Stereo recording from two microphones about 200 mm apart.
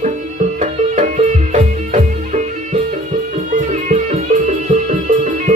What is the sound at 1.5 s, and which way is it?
Music, 40° right (ahead or behind).